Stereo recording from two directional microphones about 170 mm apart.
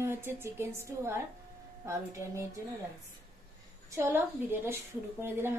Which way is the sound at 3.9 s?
15° right (ahead or behind).